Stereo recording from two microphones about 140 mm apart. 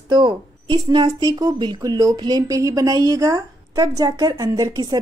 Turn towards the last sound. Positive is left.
turn(degrees=-30)  # may be behind; listen again after turning